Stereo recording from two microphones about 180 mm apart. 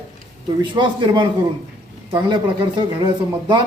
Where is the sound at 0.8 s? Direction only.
25° right (ahead or behind).